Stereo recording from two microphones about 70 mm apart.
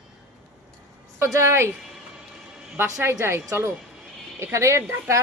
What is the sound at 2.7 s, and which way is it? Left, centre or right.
Speech, right.